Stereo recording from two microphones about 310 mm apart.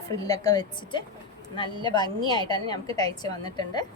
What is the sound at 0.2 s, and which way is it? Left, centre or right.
A woman's voice, centre.